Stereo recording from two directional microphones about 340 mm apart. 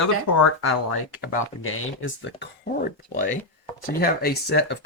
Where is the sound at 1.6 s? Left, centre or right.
Left.